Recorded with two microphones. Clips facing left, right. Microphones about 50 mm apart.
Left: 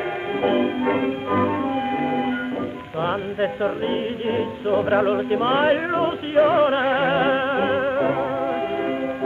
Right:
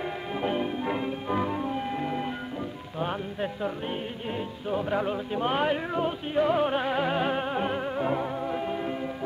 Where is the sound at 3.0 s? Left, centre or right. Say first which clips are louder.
Left 8 dB; left.